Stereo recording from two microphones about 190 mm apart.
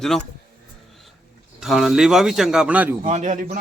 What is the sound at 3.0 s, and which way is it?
Speech, 40° right (ahead or behind).